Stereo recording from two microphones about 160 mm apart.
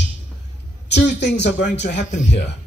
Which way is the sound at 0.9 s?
90° left.